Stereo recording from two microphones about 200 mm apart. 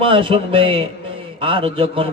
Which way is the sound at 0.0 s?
25° right (ahead or behind).